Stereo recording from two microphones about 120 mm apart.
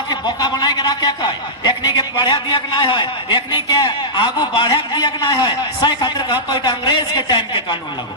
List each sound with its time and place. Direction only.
0.1 s a man's voice: 35° left (ahead or behind)